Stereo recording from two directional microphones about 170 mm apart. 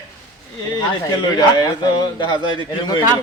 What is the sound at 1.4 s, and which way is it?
A man's voice, 25° left (ahead or behind).